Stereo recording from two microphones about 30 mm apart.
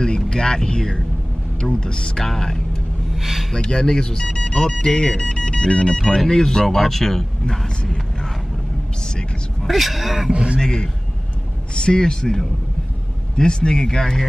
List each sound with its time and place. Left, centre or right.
0.0 s speech: left
3.2 s speech: centre
3.5 s speech: left
6.6 s speech: centre
7.6 s speech: left
9.7 s speech: centre
10.3 s a man's voice: right
10.6 s speech: left
13.4 s speech: left